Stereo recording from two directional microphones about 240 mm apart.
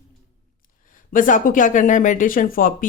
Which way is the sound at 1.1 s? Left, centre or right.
Left.